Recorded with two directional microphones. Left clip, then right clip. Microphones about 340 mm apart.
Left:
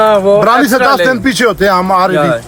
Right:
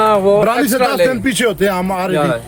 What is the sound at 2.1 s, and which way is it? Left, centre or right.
Speech, centre.